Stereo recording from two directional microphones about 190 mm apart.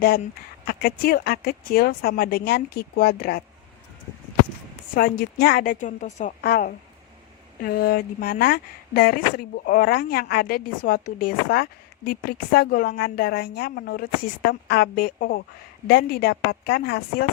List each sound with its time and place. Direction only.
0.7 s speech: 50° left (ahead or behind)
4.9 s speech: 50° left (ahead or behind)
6.4 s speech: 50° left (ahead or behind)